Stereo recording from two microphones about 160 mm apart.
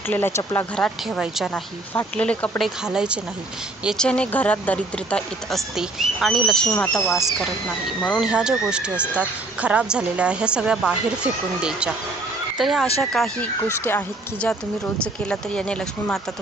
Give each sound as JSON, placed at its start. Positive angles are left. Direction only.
{"t": 0.1, "sound": "a woman's voice", "side_deg": 15}
{"t": 7.1, "sound": "speech", "side_deg": 0}
{"t": 13.6, "sound": "a woman's voice", "side_deg": 15}